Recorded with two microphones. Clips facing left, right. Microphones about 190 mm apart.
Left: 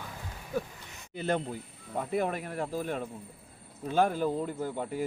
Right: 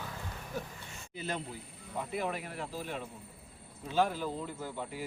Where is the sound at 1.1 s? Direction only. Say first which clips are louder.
Left 8 dB; 60° left (ahead or behind).